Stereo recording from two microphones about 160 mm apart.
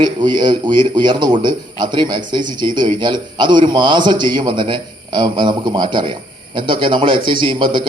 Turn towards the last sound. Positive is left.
turn(degrees=-30)  # may be behind; listen again after turning